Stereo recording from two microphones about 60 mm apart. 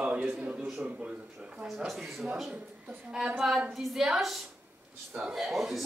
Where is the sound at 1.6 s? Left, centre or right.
Centre.